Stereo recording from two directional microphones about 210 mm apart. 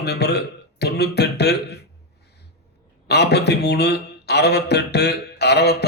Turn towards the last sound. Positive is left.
turn(degrees=50)  # may be behind; listen again after turning